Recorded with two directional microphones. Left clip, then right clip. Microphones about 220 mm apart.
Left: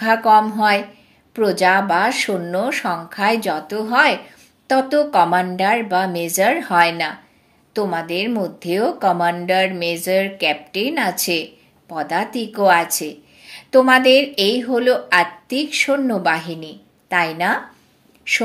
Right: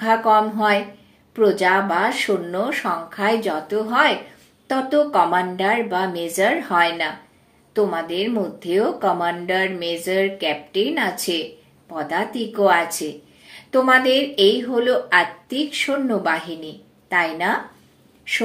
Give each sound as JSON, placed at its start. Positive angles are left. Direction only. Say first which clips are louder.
{"t": 0.0, "sound": "a woman's voice", "louder": "left 3 dB", "side_deg": 45}